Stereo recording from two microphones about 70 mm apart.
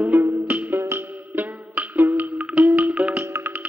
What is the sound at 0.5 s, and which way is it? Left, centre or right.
Music, right.